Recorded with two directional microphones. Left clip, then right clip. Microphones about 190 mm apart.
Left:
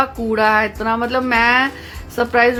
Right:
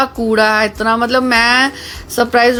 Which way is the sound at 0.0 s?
25° right (ahead or behind).